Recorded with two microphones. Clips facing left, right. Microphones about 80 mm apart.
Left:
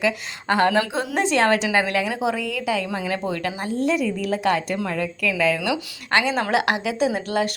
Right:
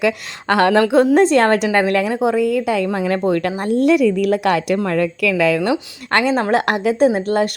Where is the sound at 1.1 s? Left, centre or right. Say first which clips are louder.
Right 7 dB; right.